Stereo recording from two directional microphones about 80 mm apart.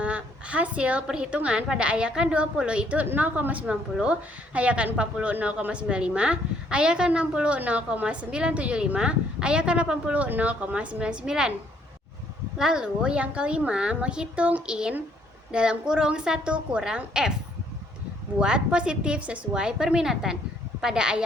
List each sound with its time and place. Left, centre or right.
0.0 s a woman's voice: centre
12.5 s a woman's voice: centre
18.3 s a woman's voice: centre